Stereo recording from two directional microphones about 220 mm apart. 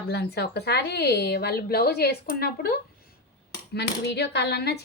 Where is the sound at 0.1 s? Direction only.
50° left (ahead or behind).